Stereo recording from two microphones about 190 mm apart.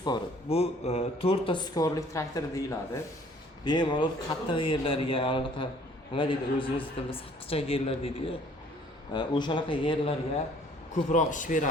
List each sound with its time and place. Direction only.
0.0 s speech: 25° left (ahead or behind)
9.1 s speech: 25° left (ahead or behind)
10.9 s speech: 40° left (ahead or behind)